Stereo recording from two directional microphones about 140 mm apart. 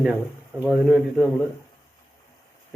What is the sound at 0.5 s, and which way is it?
Speech, 15° right (ahead or behind).